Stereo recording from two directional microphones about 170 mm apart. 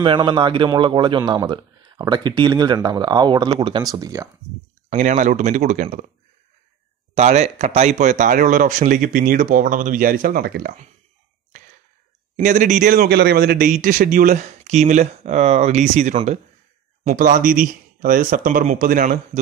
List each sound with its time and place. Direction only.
0.0 s speech: 25° right (ahead or behind)
4.8 s speech: 45° right (ahead or behind)
7.2 s speech: 40° right (ahead or behind); by 10.7 s 65° right (ahead or behind)
12.4 s speech: 45° right (ahead or behind)
12.9 s speech: 70° right (ahead or behind)